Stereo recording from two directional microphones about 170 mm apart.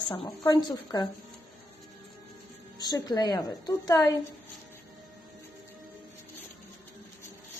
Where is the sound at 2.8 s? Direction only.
25° left (ahead or behind).